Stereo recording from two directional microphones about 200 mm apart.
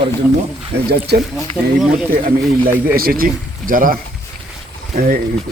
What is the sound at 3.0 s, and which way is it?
Speech, 45° right (ahead or behind).